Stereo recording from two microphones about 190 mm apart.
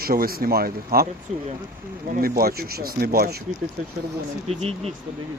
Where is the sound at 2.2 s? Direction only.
50° right (ahead or behind).